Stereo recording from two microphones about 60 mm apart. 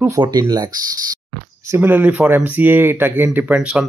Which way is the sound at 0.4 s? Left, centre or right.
Right.